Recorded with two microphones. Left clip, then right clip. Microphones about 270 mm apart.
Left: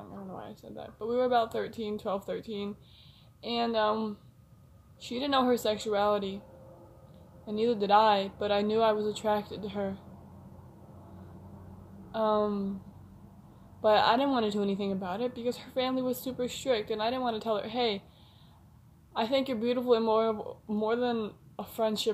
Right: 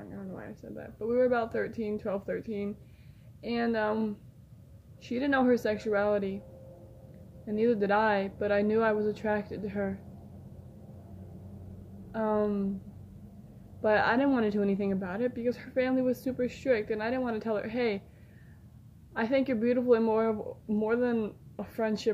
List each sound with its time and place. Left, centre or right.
0.4 s speech: centre
7.5 s speech: centre
12.4 s speech: centre
13.8 s speech: centre
19.1 s speech: centre